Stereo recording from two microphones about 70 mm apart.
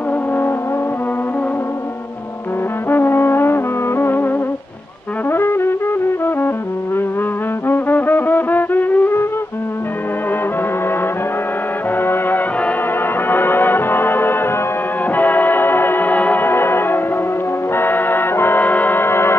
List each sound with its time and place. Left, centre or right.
2.9 s music: left
5.3 s music: left
7.6 s music: left
12.0 s brass instrument: left
13.3 s music: left